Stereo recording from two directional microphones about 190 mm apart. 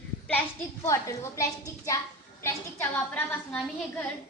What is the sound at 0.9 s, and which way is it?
A woman's voice, 15° left (ahead or behind).